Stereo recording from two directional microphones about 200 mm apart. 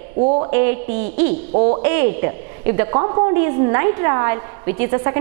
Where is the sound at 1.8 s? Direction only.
15° right (ahead or behind).